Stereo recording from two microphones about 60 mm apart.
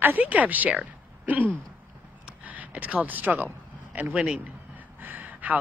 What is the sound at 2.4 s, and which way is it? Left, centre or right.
Speech, right.